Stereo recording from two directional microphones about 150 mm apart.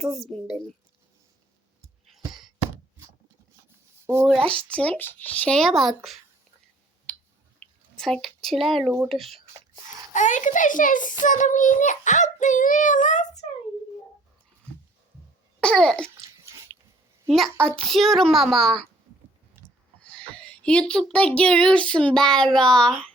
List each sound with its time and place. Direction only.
0.0 s a child's voice: centre (ahead or behind)
2.0 s a sound: centre (ahead or behind)
3.7 s rub: 15° right (ahead or behind)
4.5 s speech: 10° left (ahead or behind)
7.1 s a sound: 15° left (ahead or behind)
9.0 s a child's voice: centre (ahead or behind)
10.1 s a child's voice: 55° left (ahead or behind)
15.6 s a child's voice: 5° left (ahead or behind)
16.1 s babbling: 20° right (ahead or behind)
17.2 s a child's voice: centre (ahead or behind)
20.0 s speech: 10° left (ahead or behind)